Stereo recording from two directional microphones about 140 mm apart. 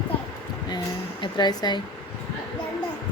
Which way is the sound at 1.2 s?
30° left (ahead or behind).